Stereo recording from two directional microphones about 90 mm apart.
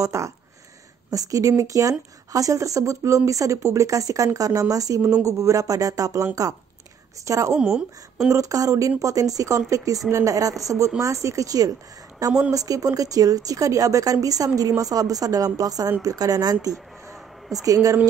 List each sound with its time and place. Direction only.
0.0 s speech: 35° right (ahead or behind)
7.2 s speech: 35° right (ahead or behind)
7.5 s a woman's voice: 5° right (ahead or behind)
8.3 s speech: 40° right (ahead or behind)
12.3 s a woman's voice: 10° right (ahead or behind)
12.5 s a woman's voice: 40° right (ahead or behind)
16.7 s a sound: centre (ahead or behind)
17.6 s speech: 40° right (ahead or behind)